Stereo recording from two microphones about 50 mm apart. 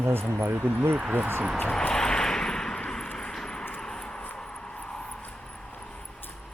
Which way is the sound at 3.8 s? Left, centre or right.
Centre.